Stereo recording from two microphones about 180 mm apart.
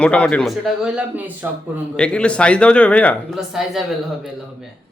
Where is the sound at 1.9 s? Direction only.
5° left (ahead or behind).